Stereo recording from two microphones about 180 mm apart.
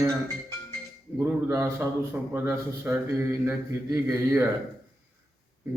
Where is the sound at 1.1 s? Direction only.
15° right (ahead or behind).